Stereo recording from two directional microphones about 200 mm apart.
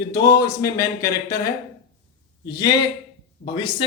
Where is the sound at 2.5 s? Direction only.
20° left (ahead or behind).